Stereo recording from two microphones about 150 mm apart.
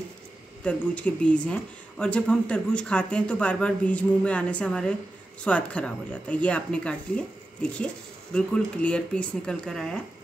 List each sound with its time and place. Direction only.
0.7 s speech: 10° left (ahead or behind)